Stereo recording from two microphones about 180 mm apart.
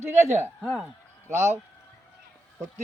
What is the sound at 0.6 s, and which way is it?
Speech, centre (ahead or behind).